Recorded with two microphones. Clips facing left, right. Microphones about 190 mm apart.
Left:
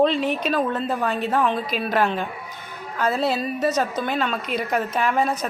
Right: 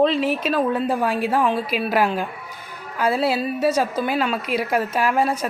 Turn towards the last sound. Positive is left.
turn(degrees=-5)  # may be behind; listen again after turning